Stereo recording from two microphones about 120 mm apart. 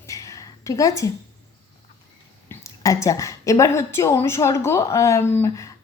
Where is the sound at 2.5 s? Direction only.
25° left (ahead or behind).